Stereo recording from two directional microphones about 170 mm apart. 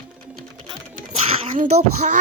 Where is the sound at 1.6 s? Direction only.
45° right (ahead or behind).